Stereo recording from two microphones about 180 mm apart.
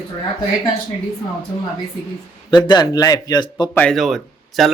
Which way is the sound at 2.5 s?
25° left (ahead or behind).